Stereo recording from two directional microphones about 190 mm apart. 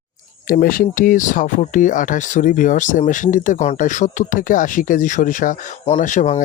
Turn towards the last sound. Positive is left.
turn(degrees=40)  # may be behind; listen again after turning